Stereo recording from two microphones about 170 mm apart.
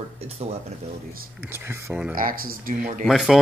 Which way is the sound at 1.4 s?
10° right (ahead or behind).